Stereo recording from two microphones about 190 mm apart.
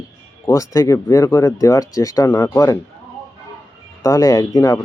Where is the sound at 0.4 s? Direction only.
15° left (ahead or behind).